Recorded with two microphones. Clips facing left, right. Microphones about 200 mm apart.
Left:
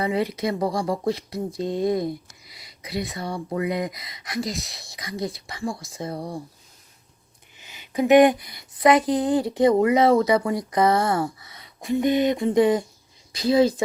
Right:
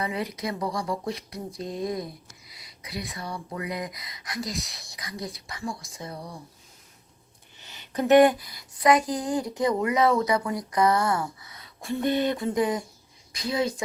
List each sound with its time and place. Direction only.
0.0 s speech: 30° left (ahead or behind)
6.1 s speech: 50° left (ahead or behind)
7.6 s speech: 15° left (ahead or behind); by 11.6 s 30° left (ahead or behind)
11.6 s speech: 15° left (ahead or behind); by 13.8 s 30° left (ahead or behind)